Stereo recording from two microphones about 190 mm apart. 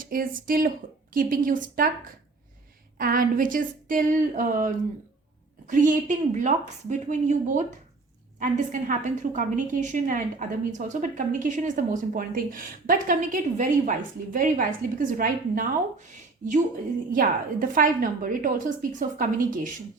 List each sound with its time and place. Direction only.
0.0 s speech: 50° right (ahead or behind)
3.0 s a woman's voice: 50° right (ahead or behind)
17.1 s speech: 45° right (ahead or behind)